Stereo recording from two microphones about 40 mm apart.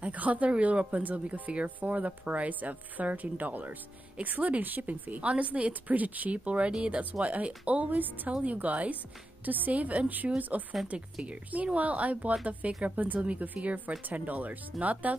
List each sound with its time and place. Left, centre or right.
0.0 s speech: right
10.9 s speech: right
11.2 s speech: right
13.2 s speech: right